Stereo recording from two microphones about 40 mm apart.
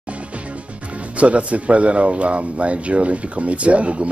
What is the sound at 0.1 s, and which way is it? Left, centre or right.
Speech, right.